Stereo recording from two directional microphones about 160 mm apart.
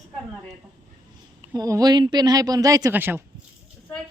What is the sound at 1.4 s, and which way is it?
Speech, 20° right (ahead or behind).